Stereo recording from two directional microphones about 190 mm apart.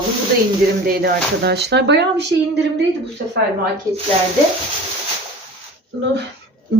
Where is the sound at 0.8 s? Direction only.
50° right (ahead or behind).